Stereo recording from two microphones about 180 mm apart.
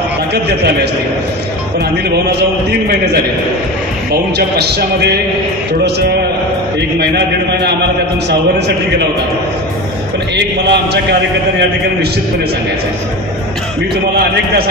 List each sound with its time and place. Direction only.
0.3 s a man's voice: 65° right (ahead or behind)
4.1 s a man's voice: 60° right (ahead or behind)
10.3 s a man's voice: 70° right (ahead or behind)